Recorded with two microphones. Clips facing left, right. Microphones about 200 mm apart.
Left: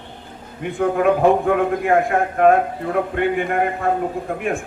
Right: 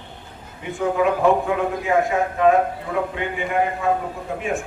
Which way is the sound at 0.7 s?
55° left (ahead or behind).